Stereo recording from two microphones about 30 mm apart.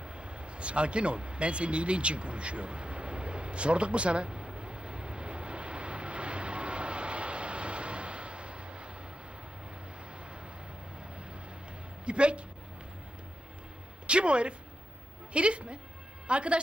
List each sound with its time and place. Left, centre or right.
0.0 s a sound: right
12.0 s a woman's voice: right
14.1 s a woman's voice: right